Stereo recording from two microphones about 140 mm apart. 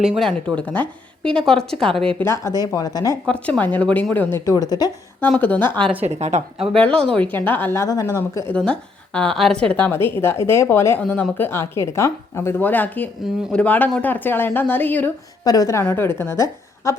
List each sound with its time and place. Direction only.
0.5 s a woman's voice: 10° left (ahead or behind)
2.2 s a woman's voice: 20° left (ahead or behind)
3.2 s a woman's voice: 5° left (ahead or behind); by 4.9 s 25° left (ahead or behind)
5.2 s a woman's voice: 10° left (ahead or behind)
6.1 s a woman's voice: 50° right (ahead or behind)
6.7 s a woman's voice: 5° left (ahead or behind)
8.5 s a woman's voice: 5° left (ahead or behind)
15.4 s a woman's voice: 25° left (ahead or behind)
15.8 s a woman's voice: 15° left (ahead or behind)